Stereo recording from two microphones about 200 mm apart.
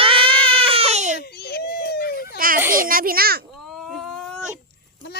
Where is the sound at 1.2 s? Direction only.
55° left (ahead or behind).